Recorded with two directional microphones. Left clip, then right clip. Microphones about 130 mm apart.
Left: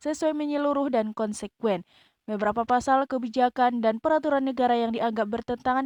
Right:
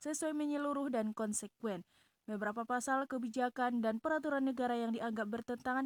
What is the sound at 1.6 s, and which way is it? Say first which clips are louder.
Speech: left 19 dB; 50° left (ahead or behind).